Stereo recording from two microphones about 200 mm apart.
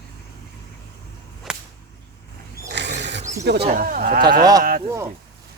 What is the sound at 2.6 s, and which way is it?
Wild animals, 60° right (ahead or behind).